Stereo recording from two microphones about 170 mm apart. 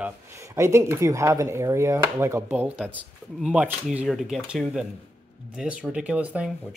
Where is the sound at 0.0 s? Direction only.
15° right (ahead or behind).